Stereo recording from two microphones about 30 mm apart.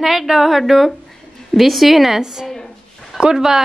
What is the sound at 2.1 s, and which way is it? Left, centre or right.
A woman's voice, centre.